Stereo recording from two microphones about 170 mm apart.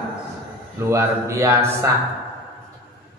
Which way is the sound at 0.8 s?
15° right (ahead or behind).